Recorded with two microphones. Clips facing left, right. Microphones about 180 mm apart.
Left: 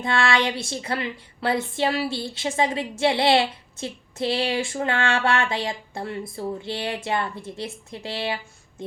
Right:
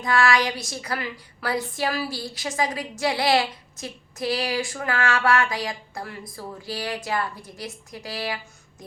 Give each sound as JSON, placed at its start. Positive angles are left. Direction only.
{"t": 0.0, "sound": "speech", "side_deg": 30}